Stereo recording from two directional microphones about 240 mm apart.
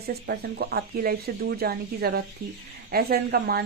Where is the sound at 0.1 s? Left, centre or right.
Right.